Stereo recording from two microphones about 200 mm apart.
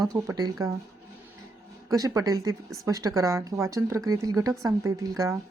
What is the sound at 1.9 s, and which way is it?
Speech, 15° right (ahead or behind).